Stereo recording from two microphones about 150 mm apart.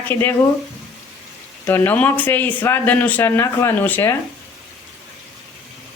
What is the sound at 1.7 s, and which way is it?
Speech, 15° left (ahead or behind).